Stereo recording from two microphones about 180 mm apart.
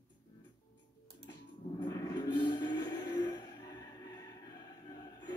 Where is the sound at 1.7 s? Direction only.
20° left (ahead or behind).